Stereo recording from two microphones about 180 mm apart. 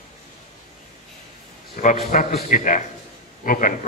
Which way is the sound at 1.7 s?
45° left (ahead or behind).